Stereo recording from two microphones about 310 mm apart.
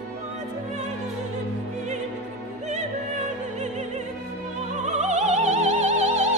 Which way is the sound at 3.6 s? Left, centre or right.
Right.